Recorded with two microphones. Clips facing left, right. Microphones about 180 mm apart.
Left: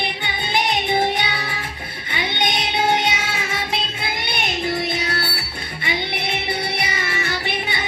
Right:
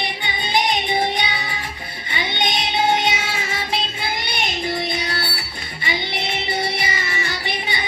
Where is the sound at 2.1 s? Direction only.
55° left (ahead or behind).